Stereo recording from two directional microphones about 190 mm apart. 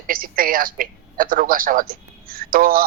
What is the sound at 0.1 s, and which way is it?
A man's voice, 50° right (ahead or behind).